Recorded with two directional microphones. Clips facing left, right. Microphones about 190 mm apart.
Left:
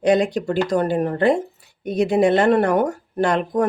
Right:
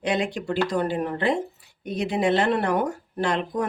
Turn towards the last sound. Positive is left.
turn(degrees=45)  # may be behind; listen again after turning